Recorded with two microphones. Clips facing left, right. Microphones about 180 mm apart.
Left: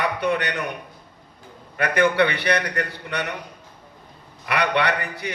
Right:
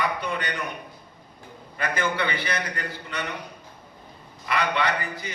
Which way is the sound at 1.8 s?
70° left (ahead or behind).